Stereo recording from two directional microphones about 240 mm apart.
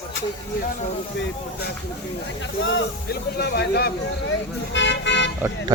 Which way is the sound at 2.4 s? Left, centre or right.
Left.